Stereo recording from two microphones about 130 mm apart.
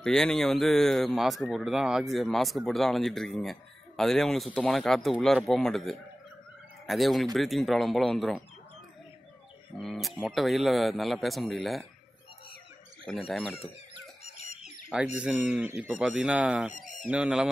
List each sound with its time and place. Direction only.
0.0 s speech: 5° left (ahead or behind)
9.8 s speech: centre (ahead or behind)
13.3 s speech: 5° left (ahead or behind)
14.2 s a sound: 55° left (ahead or behind)
14.6 s a sound: 5° right (ahead or behind)
15.2 s speech: 10° right (ahead or behind)